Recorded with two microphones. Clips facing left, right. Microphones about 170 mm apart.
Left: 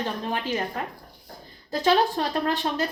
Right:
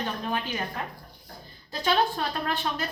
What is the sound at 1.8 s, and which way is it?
Speech, 35° left (ahead or behind).